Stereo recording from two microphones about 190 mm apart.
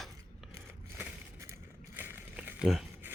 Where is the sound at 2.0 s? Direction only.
10° right (ahead or behind).